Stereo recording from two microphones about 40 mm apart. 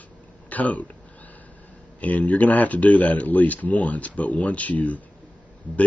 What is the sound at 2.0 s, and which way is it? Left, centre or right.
Speech, left.